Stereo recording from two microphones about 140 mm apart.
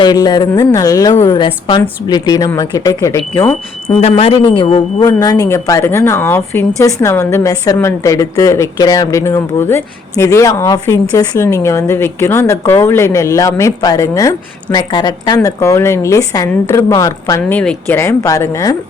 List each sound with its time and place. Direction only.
0.0 s a woman's voice: 30° left (ahead or behind)
3.8 s speech: 45° left (ahead or behind); by 17.4 s 25° left (ahead or behind)
17.5 s speech: 5° left (ahead or behind)
17.8 s speech: 20° left (ahead or behind)